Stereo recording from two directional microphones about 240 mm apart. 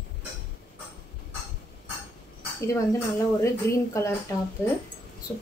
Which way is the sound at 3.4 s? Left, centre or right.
Centre.